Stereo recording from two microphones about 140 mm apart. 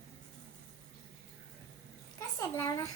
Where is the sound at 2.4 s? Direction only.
25° left (ahead or behind).